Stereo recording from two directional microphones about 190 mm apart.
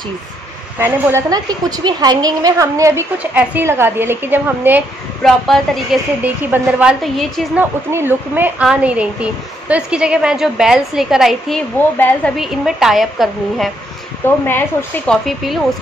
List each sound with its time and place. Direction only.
0.7 s speech: 15° right (ahead or behind)
5.2 s a woman's voice: centre (ahead or behind)
7.9 s a woman's voice: 10° right (ahead or behind)
14.2 s speech: 10° left (ahead or behind)